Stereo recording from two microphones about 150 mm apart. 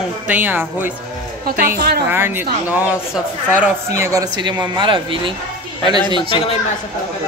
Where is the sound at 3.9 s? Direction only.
20° right (ahead or behind).